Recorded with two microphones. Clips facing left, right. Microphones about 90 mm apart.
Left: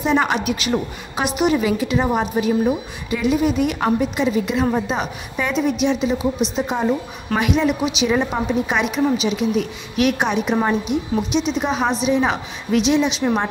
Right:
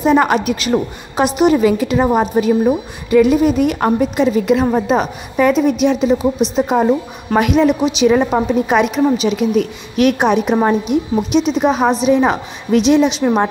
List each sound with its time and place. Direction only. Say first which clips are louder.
0.0 s a woman's voice: right 6 dB; 45° right (ahead or behind)
3.1 s a woman's voice: right 8 dB; 50° right (ahead or behind)
10.5 s a woman's voice: right 5 dB; 30° right (ahead or behind)
10.9 s a woman's voice: right 5 dB; 45° right (ahead or behind)
13.2 s a woman's voice: right 5 dB; 30° right (ahead or behind)